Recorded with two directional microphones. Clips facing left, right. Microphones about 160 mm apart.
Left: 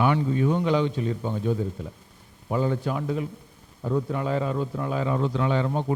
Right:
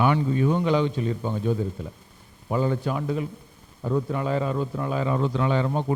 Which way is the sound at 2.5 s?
25° right (ahead or behind).